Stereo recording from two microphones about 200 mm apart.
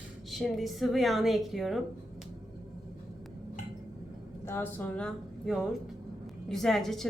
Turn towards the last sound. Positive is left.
turn(degrees=0)  # may be behind; listen again after turning